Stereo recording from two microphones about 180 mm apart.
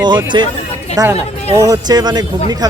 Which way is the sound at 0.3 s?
25° right (ahead or behind).